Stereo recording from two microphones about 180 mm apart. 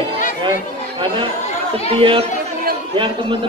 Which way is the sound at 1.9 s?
30° right (ahead or behind).